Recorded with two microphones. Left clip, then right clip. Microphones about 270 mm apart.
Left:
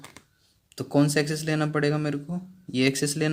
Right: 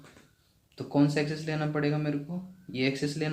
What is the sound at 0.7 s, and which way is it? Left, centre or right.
Speech, left.